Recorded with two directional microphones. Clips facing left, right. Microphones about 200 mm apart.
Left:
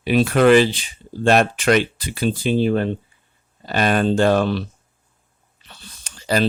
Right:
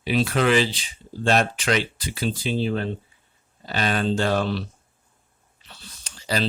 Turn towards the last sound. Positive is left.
turn(degrees=55)  # may be behind; listen again after turning